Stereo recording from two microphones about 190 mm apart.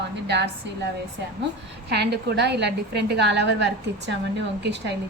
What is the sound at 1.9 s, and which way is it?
A woman's voice, 60° right (ahead or behind).